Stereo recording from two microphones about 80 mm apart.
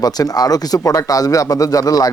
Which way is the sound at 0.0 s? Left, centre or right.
Left.